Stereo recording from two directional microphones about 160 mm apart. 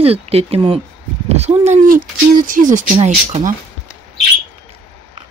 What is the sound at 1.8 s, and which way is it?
Speech, 60° right (ahead or behind).